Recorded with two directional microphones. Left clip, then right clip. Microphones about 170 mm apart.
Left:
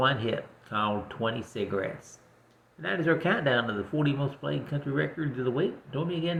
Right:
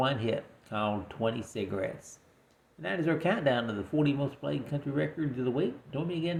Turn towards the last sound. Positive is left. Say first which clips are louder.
# left 2 dB
turn(degrees=-35)  # may be behind; listen again after turning